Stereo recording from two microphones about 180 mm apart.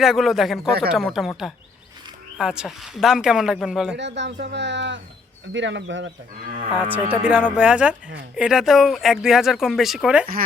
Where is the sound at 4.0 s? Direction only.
75° right (ahead or behind).